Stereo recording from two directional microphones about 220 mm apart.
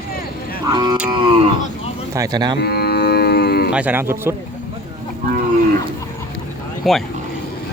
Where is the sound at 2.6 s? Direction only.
45° left (ahead or behind).